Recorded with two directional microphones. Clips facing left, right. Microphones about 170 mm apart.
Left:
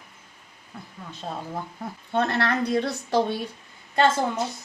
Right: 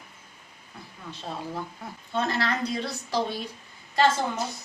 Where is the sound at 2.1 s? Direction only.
60° left (ahead or behind).